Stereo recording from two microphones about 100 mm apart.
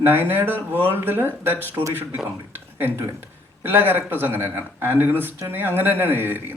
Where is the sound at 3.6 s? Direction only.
20° right (ahead or behind).